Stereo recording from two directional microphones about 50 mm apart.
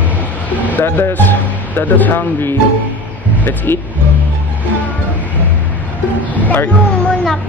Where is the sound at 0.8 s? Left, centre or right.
Left.